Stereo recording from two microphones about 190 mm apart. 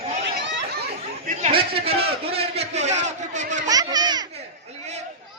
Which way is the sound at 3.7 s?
20° right (ahead or behind).